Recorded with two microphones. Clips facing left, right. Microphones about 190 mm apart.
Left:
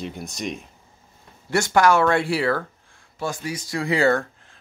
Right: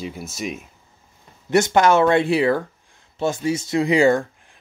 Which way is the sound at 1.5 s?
20° right (ahead or behind).